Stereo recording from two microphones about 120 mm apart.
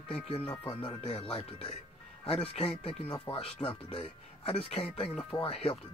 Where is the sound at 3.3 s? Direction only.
50° left (ahead or behind).